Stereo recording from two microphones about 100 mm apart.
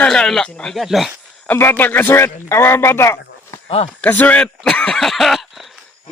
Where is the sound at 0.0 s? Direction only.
5° left (ahead or behind).